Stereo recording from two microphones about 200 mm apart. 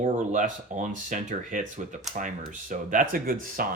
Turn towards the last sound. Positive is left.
turn(degrees=-45)  # may be behind; listen again after turning